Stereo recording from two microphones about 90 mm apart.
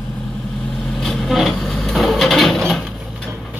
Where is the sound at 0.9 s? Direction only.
Centre (ahead or behind).